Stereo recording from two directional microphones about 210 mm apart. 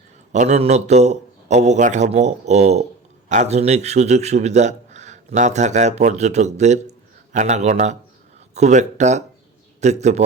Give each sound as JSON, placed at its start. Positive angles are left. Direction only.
{"t": 0.3, "sound": "a man's voice", "side_deg": -30}